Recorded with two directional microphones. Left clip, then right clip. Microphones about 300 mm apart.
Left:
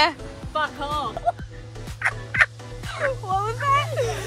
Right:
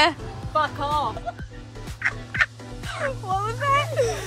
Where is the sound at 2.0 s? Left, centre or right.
Left.